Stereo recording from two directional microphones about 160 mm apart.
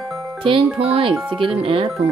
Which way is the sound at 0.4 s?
35° right (ahead or behind).